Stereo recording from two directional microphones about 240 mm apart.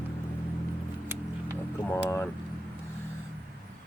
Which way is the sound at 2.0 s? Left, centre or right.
Centre.